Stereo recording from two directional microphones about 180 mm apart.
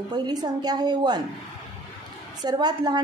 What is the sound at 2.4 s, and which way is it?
Speech, 20° right (ahead or behind).